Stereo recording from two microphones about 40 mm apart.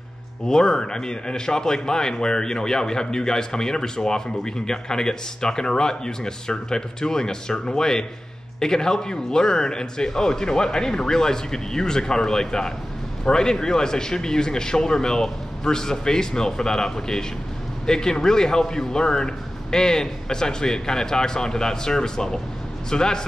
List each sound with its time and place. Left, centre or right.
0.5 s a man's voice: centre